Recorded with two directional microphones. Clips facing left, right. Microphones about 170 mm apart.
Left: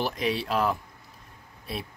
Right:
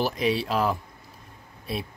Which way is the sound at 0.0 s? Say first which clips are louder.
Right 3 dB; centre (ahead or behind).